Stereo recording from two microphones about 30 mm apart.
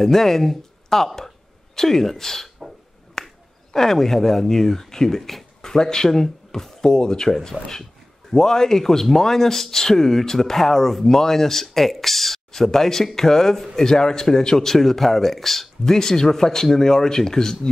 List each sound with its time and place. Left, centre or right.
0.0 s a man's voice: centre
3.2 s finger snapping: centre
3.7 s a man's voice: centre
7.2 s a man's voice: centre
15.8 s a man's voice: centre